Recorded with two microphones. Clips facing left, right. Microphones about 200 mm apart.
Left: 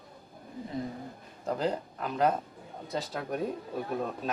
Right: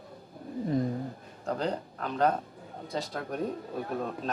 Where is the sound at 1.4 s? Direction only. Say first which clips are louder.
Left 1 dB; 5° left (ahead or behind).